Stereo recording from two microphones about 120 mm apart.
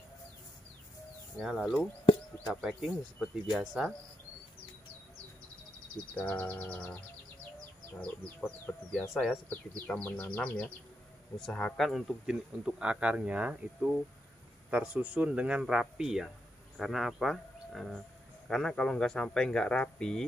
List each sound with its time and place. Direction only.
1.4 s speech: 5° right (ahead or behind)
2.1 s a sound: 45° left (ahead or behind)
2.4 s speech: centre (ahead or behind)
6.1 s speech: 10° left (ahead or behind)
8.0 s speech: 15° left (ahead or behind)
9.5 s speech: 15° left (ahead or behind)